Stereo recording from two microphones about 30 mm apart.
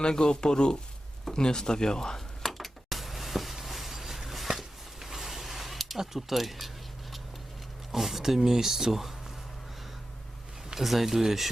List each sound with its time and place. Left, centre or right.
0.0 s speech: left
2.5 s a sound: centre
6.0 s speech: centre
7.9 s speech: centre
10.8 s speech: centre